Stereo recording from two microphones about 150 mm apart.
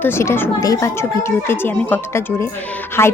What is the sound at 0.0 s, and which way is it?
A woman's voice, 15° left (ahead or behind).